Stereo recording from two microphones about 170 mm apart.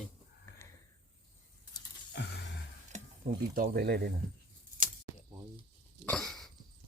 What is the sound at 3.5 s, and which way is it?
Speech, 60° right (ahead or behind).